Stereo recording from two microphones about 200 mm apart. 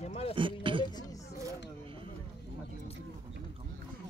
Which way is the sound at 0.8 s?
20° left (ahead or behind).